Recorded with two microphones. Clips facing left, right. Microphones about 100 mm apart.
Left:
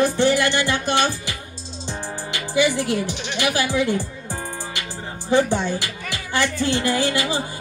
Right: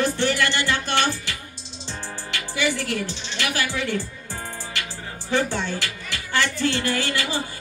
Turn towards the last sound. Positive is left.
turn(degrees=15)  # may be behind; listen again after turning